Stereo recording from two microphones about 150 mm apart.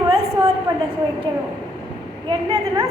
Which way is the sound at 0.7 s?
25° right (ahead or behind).